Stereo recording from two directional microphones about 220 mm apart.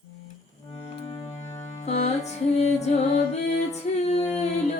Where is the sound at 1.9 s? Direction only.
30° left (ahead or behind).